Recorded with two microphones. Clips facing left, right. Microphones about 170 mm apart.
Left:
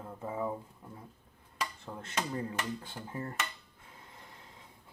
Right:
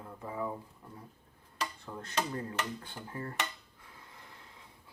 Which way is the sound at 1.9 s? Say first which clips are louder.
Right 2 dB; 20° left (ahead or behind).